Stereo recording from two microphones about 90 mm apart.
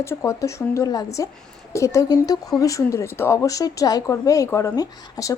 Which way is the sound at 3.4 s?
40° left (ahead or behind).